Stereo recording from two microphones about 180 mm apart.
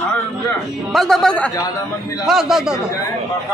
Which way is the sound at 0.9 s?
Centre (ahead or behind).